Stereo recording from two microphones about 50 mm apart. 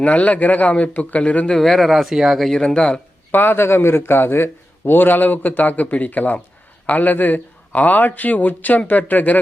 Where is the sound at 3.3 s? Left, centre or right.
Left.